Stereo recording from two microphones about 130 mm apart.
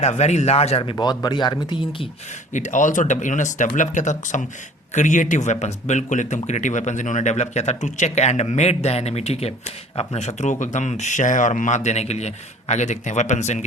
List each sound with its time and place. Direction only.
0.0 s speech: 55° left (ahead or behind); by 2.0 s 35° left (ahead or behind)
2.5 s a man's voice: 70° left (ahead or behind)